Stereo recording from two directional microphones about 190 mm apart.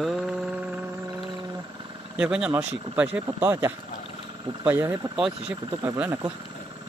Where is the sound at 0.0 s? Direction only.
Centre (ahead or behind).